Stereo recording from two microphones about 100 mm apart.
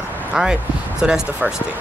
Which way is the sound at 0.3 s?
5° right (ahead or behind).